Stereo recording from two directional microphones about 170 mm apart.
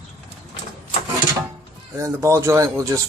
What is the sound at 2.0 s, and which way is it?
Speech, 15° right (ahead or behind).